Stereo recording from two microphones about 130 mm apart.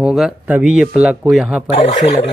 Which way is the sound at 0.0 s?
Centre (ahead or behind).